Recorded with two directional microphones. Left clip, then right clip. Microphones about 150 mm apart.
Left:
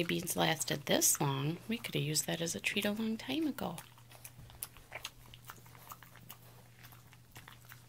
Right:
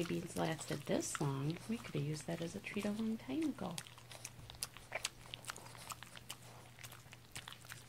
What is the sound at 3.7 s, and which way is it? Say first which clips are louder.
Biting: right 2 dB; 15° right (ahead or behind).